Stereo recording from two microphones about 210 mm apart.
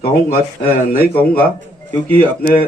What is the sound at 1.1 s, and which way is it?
Speech, 5° left (ahead or behind).